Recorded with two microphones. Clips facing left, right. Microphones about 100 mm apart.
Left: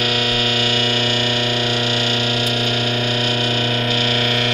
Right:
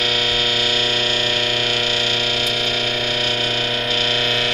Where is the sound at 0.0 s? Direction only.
15° left (ahead or behind).